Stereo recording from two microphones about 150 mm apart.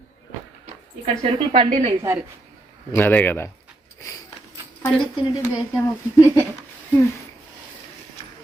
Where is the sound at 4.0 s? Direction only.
25° left (ahead or behind).